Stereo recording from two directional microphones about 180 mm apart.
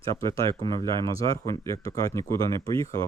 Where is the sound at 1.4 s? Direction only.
15° left (ahead or behind).